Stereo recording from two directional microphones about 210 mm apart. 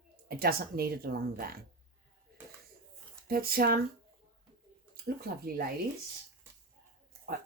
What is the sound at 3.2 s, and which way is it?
Speech, 45° right (ahead or behind).